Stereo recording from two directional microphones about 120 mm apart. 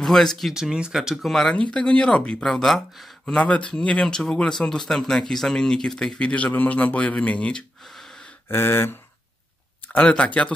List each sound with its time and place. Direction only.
0.0 s speech: 5° left (ahead or behind)
8.5 s a sound: 20° left (ahead or behind)
9.9 s speech: 10° left (ahead or behind)